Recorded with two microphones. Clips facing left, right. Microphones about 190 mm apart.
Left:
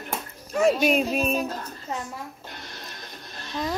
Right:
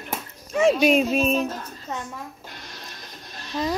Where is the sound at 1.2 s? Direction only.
10° left (ahead or behind).